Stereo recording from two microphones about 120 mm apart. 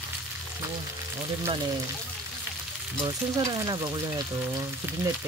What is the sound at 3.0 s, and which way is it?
Speech, 35° right (ahead or behind).